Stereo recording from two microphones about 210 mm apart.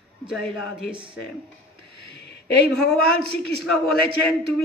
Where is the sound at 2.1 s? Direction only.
55° left (ahead or behind).